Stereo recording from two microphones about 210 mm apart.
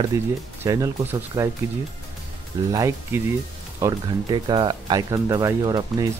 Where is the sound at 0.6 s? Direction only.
15° right (ahead or behind).